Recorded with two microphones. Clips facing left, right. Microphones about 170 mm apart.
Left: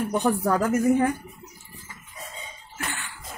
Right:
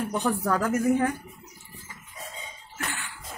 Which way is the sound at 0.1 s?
20° left (ahead or behind).